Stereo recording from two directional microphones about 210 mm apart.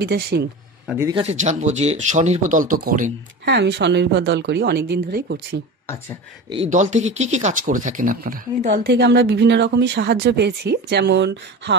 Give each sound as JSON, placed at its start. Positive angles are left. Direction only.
{"t": 0.0, "sound": "speech", "side_deg": -50}
{"t": 0.8, "sound": "speech", "side_deg": -10}
{"t": 1.1, "sound": "speech", "side_deg": -30}
{"t": 6.5, "sound": "speech", "side_deg": -30}